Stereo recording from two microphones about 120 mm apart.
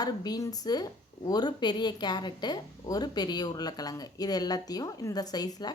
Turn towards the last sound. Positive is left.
turn(degrees=35)  # may be behind; listen again after turning